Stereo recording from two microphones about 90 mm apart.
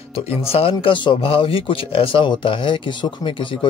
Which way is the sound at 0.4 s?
90° left.